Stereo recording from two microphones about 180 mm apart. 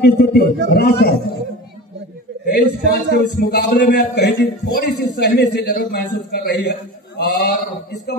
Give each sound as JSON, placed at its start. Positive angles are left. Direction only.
{"t": 0.0, "sound": "a man's voice", "side_deg": 60}
{"t": 2.4, "sound": "a man's voice", "side_deg": 65}